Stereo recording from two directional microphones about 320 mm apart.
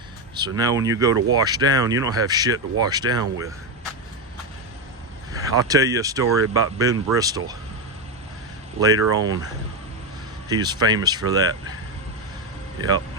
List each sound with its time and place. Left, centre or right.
0.3 s speech: centre
5.3 s speech: centre
8.8 s speech: centre
10.5 s speech: centre